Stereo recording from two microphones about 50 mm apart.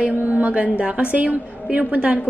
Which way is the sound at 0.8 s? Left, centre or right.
Right.